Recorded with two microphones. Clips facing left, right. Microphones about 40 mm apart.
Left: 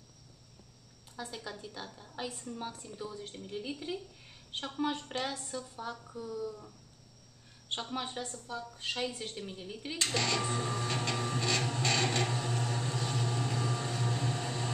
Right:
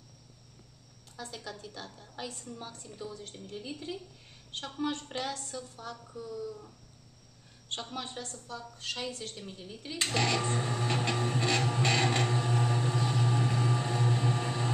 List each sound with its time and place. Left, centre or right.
1.1 s a woman's voice: centre
7.7 s a woman's voice: centre
9.9 s a sound: centre